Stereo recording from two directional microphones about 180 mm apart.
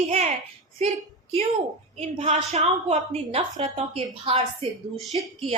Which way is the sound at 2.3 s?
40° right (ahead or behind).